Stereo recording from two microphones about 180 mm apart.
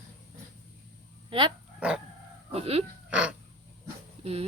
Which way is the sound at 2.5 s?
35° right (ahead or behind).